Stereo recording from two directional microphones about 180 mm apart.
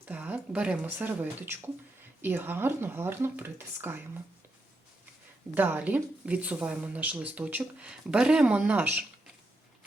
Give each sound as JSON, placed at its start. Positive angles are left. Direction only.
{"t": 0.0, "sound": "speech", "side_deg": -10}
{"t": 5.5, "sound": "speech", "side_deg": -10}